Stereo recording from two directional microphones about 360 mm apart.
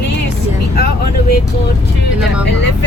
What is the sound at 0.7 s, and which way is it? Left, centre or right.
Speech, left.